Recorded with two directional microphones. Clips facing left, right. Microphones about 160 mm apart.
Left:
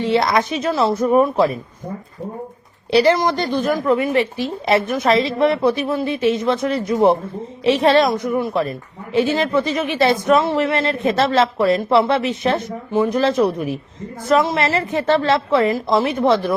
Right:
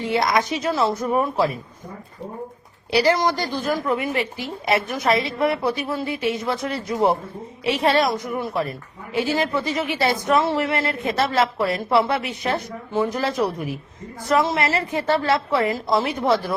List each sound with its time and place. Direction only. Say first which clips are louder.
0.0 s speech: left 4 dB; 25° left (ahead or behind)
2.9 s speech: left 4 dB; 25° left (ahead or behind)